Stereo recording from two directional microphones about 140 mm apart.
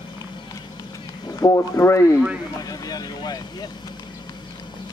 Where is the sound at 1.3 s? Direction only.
20° left (ahead or behind).